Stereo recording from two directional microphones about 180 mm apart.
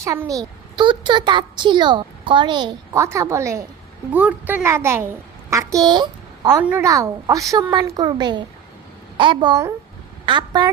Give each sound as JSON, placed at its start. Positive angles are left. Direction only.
{"t": 0.0, "sound": "a child's voice", "side_deg": -15}
{"t": 6.6, "sound": "a child's voice", "side_deg": -10}